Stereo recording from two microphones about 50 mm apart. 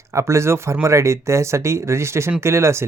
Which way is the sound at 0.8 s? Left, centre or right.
Right.